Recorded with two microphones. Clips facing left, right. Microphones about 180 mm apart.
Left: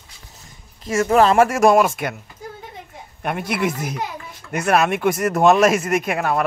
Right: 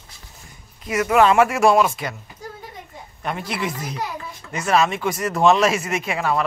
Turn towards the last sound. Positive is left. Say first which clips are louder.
# left 2 dB
turn(degrees=55)  # may be behind; listen again after turning